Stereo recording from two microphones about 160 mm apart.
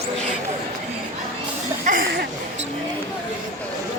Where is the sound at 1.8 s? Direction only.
75° right (ahead or behind).